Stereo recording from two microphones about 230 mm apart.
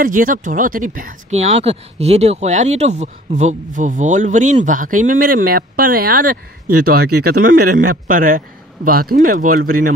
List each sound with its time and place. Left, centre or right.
0.0 s speech: right